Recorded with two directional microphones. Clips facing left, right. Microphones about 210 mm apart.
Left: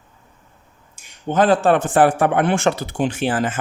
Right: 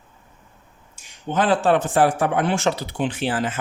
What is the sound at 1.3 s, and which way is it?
Speech, 45° left (ahead or behind).